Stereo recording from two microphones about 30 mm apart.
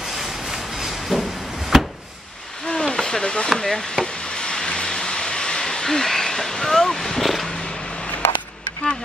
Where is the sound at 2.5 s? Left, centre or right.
Left.